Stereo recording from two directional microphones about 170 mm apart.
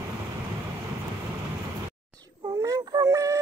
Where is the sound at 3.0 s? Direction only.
20° right (ahead or behind).